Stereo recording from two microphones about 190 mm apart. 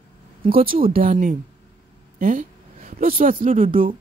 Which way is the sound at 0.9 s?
45° right (ahead or behind).